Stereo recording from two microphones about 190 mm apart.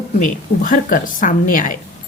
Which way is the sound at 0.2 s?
45° left (ahead or behind).